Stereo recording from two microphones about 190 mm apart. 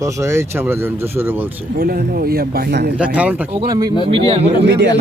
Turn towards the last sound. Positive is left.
turn(degrees=-65)  # may be behind; listen again after turning